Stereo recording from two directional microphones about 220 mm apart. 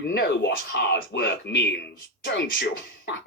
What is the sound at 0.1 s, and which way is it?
Speech, 50° left (ahead or behind).